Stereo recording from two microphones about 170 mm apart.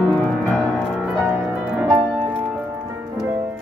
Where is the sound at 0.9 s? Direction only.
5° right (ahead or behind).